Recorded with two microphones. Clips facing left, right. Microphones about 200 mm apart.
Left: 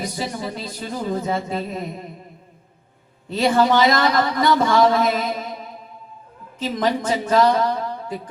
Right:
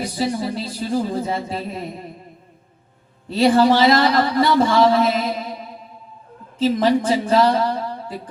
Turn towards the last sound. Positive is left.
turn(degrees=-35)  # may be behind; listen again after turning